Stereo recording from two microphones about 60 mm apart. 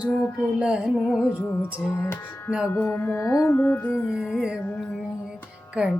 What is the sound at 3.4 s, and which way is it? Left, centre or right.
Music, left.